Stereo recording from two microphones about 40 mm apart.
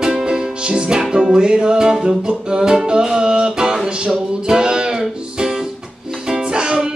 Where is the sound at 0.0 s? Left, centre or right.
Centre.